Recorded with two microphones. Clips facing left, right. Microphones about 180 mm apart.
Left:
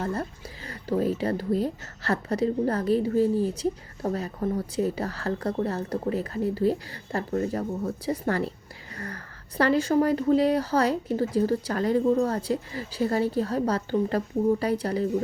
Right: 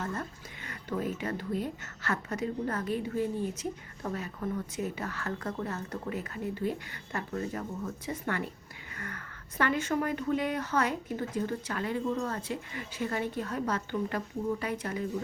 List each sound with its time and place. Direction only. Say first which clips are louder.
0.0 s speech: left 6 dB; 35° left (ahead or behind)